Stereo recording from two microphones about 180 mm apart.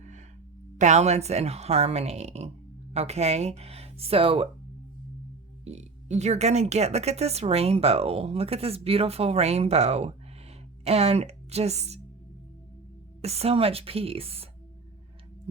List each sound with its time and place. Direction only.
0.8 s speech: 40° right (ahead or behind)
5.6 s speech: 40° right (ahead or behind)
13.2 s speech: 35° right (ahead or behind)